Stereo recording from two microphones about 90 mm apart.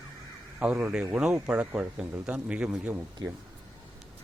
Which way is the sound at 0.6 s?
15° right (ahead or behind).